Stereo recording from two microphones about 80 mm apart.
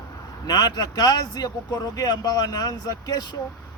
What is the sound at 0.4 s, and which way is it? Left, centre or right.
A man's voice, left.